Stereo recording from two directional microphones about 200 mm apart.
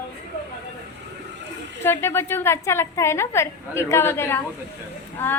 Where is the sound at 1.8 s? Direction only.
10° left (ahead or behind).